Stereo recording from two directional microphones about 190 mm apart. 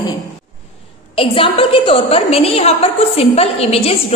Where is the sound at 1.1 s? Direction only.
30° left (ahead or behind).